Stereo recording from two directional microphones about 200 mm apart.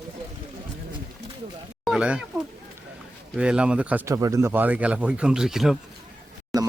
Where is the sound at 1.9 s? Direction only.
5° right (ahead or behind).